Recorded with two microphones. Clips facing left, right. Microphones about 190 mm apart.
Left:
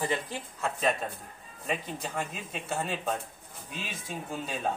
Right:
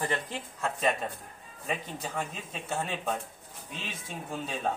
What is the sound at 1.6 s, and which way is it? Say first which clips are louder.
A man's voice: left 1 dB; centre (ahead or behind).